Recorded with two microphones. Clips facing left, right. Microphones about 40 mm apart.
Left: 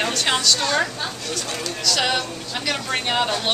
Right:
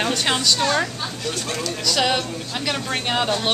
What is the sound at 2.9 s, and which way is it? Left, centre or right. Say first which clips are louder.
Speech: even; centre.